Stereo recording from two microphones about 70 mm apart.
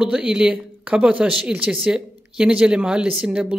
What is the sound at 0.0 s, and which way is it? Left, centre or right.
A woman's voice, centre.